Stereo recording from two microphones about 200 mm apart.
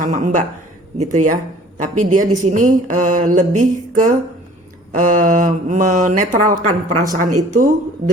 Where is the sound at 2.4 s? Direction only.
40° right (ahead or behind).